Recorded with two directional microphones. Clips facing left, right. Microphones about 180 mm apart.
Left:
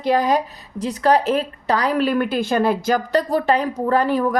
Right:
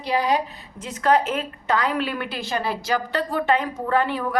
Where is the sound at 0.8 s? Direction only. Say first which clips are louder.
Left 3 dB; 35° left (ahead or behind).